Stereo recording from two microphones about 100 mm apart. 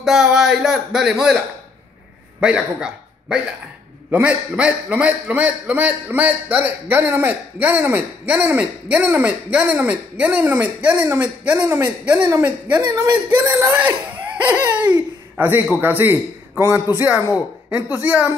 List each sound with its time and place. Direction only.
0.0 s speech: 5° right (ahead or behind)
2.4 s a man's voice: 10° right (ahead or behind)